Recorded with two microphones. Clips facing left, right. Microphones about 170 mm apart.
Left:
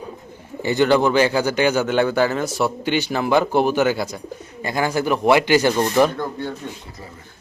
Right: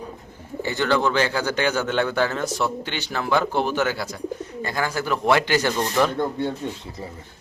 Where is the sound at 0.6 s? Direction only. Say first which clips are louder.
Left 5 dB; 15° left (ahead or behind).